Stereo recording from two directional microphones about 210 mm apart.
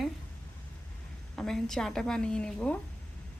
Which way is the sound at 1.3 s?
Centre (ahead or behind).